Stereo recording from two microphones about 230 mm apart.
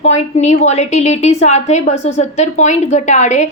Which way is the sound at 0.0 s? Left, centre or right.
Left.